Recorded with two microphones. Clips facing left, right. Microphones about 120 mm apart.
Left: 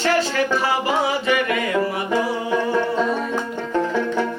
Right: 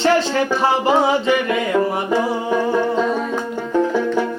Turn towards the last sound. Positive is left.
turn(degrees=-10)  # may be behind; listen again after turning